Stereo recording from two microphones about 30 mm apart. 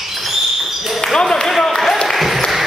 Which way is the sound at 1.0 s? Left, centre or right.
Centre.